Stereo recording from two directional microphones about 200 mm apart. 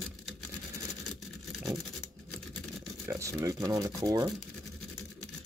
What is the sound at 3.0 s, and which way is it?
Speech, 15° right (ahead or behind).